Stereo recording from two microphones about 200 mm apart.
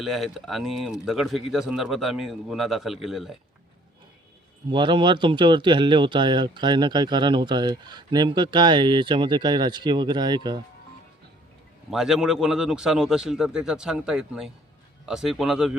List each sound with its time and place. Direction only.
0.0 s speech: centre (ahead or behind)
4.7 s speech: 25° right (ahead or behind)
11.9 s speech: centre (ahead or behind)